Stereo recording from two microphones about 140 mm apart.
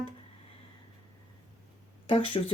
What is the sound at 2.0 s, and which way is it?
Speech, 40° left (ahead or behind).